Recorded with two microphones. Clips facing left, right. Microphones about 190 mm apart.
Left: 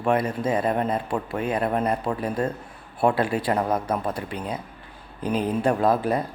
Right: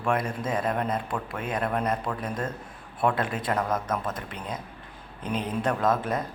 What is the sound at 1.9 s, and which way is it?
Speech, 30° left (ahead or behind).